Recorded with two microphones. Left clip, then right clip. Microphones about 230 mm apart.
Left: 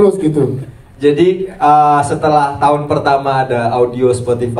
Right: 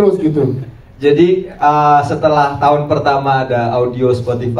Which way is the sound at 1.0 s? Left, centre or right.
Left.